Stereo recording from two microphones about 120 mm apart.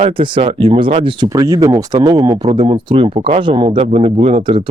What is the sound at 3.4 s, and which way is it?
Speech, 45° right (ahead or behind).